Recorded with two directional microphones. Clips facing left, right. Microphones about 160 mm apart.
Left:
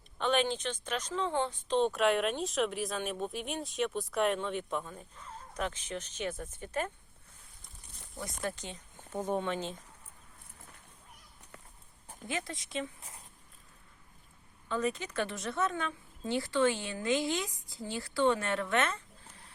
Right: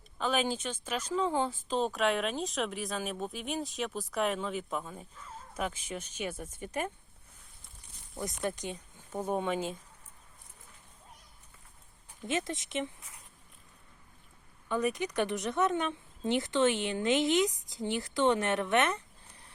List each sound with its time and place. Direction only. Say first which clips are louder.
0.2 s speech: left 1 dB; 5° right (ahead or behind)
8.2 s speech: right 3 dB; 20° right (ahead or behind)
12.3 s speech: right 4 dB; 20° right (ahead or behind)
13.0 s a sound: left 3 dB; 30° left (ahead or behind)
14.7 s speech: right 2 dB; 15° right (ahead or behind)